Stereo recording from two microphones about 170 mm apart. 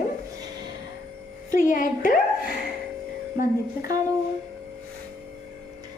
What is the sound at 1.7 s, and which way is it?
Speech, 50° left (ahead or behind).